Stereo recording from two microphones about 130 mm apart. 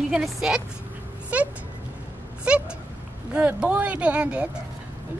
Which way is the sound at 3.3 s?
10° right (ahead or behind).